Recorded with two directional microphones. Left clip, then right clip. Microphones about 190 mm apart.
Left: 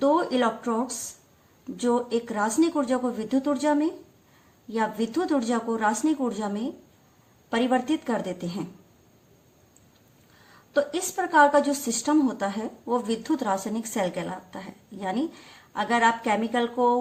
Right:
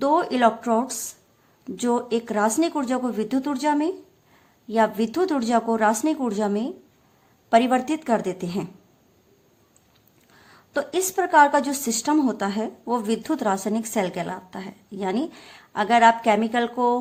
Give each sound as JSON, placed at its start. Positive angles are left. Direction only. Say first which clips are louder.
{"t": 0.0, "sound": "speech", "louder": "right 3 dB", "side_deg": -40}
{"t": 10.8, "sound": "a woman's voice", "louder": "right 2 dB", "side_deg": -45}